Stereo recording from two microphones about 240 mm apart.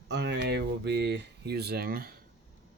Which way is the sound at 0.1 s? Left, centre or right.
Right.